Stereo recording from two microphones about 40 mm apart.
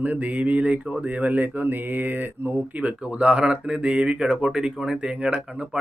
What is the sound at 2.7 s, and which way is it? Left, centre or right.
Speech, right.